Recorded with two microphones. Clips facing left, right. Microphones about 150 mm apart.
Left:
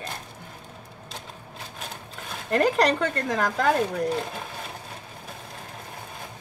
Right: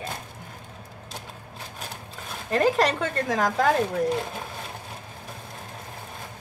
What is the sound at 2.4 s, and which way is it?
Speech, 5° right (ahead or behind).